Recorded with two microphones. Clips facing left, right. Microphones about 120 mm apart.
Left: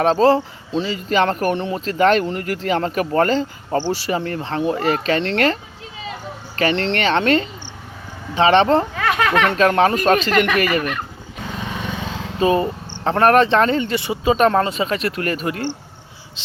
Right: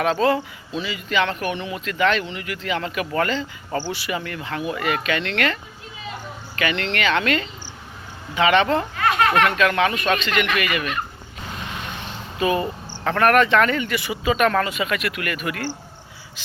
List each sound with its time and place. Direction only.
0.0 s speech: 35° left (ahead or behind)
6.6 s speech: 35° left (ahead or behind)
12.4 s cricket: 30° left (ahead or behind)
13.1 s speech: 30° left (ahead or behind)